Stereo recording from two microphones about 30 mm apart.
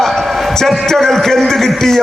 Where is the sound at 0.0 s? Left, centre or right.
Centre.